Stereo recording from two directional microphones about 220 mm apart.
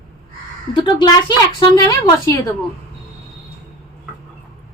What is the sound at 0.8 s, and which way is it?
A woman's voice, 20° left (ahead or behind).